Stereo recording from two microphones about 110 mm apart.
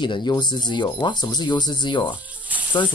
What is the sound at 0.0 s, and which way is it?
Speech, 45° left (ahead or behind).